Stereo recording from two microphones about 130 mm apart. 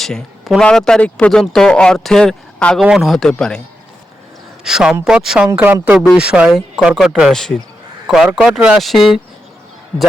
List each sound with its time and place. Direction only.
0.0 s speech: centre (ahead or behind)
4.6 s speech: 5° right (ahead or behind)